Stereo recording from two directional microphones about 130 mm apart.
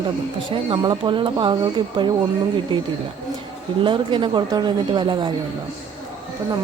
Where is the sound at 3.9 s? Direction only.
40° right (ahead or behind).